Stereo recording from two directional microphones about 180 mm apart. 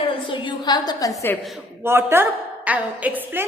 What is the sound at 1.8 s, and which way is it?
A woman's voice, 15° right (ahead or behind).